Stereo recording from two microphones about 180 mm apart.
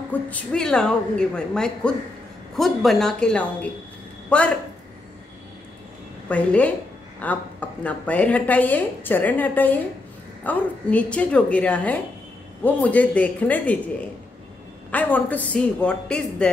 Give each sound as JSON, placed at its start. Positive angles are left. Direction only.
{"t": 0.1, "sound": "a woman's voice", "side_deg": 10}
{"t": 6.2, "sound": "a woman's voice", "side_deg": 5}
{"t": 14.9, "sound": "a woman's voice", "side_deg": 10}